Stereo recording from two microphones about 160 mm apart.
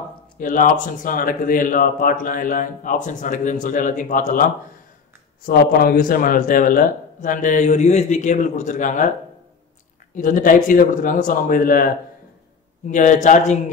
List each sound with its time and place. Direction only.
0.4 s speech: 55° left (ahead or behind)
5.4 s speech: 70° left (ahead or behind); by 9.1 s 50° left (ahead or behind)
10.1 s speech: 55° left (ahead or behind)
12.8 s speech: 50° left (ahead or behind)